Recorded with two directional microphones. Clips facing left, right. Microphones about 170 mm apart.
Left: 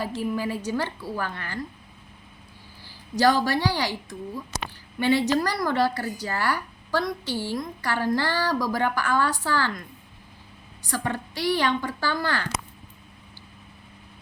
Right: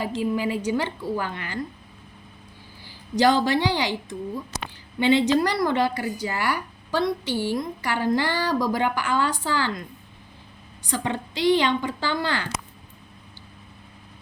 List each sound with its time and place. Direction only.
0.0 s a woman's voice: 15° right (ahead or behind)
3.2 s a woman's voice: 20° right (ahead or behind)
4.9 s a woman's voice: 20° right (ahead or behind)
10.8 s a woman's voice: 20° right (ahead or behind)